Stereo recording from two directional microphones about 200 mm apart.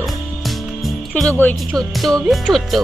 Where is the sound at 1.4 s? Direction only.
5° left (ahead or behind).